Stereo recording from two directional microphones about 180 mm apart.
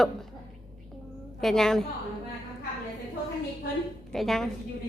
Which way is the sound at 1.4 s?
Centre (ahead or behind).